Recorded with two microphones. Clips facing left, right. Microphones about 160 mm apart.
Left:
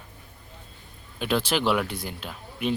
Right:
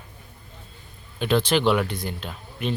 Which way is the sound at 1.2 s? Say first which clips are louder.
Right 4 dB; 5° left (ahead or behind).